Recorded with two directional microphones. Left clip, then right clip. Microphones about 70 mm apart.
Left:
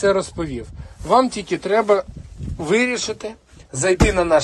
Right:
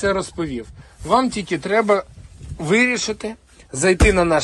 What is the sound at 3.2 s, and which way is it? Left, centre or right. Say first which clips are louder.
Speech: right 1 dB; left.